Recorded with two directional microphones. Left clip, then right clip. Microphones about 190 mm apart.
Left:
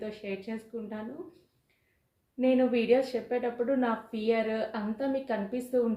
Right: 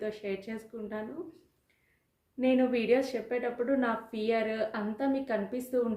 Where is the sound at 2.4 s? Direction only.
15° right (ahead or behind).